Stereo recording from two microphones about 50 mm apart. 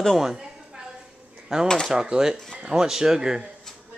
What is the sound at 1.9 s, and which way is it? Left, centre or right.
Speech, centre.